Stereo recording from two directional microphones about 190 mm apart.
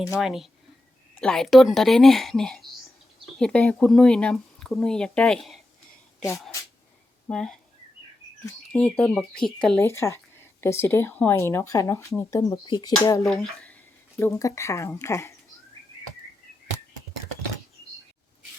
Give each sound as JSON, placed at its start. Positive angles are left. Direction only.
{"t": 0.2, "sound": "speech", "side_deg": 0}
{"t": 7.3, "sound": "speech", "side_deg": 5}
{"t": 8.8, "sound": "speech", "side_deg": 5}
{"t": 13.2, "sound": "speech", "side_deg": 0}
{"t": 14.2, "sound": "speech", "side_deg": 15}